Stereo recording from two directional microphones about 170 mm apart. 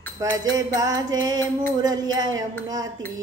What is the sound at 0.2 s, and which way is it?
Music, 20° right (ahead or behind).